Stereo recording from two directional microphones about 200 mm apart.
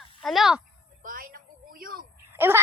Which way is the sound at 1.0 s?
45° right (ahead or behind).